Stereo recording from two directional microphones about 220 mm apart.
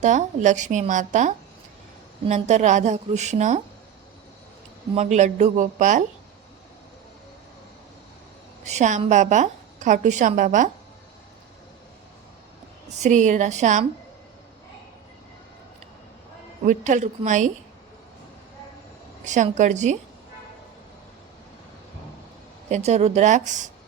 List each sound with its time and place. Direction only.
0.0 s a woman's voice: 35° right (ahead or behind)
4.9 s a woman's voice: 30° right (ahead or behind)
8.6 s a woman's voice: 30° right (ahead or behind)
13.0 s a woman's voice: 35° right (ahead or behind)
16.6 s a woman's voice: 35° right (ahead or behind)
19.2 s a woman's voice: 35° right (ahead or behind)
22.7 s a woman's voice: 30° right (ahead or behind)